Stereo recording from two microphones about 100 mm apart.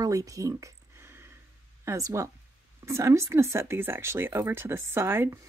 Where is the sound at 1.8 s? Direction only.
30° right (ahead or behind).